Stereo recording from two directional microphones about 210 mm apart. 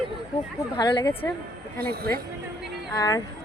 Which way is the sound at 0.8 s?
20° left (ahead or behind).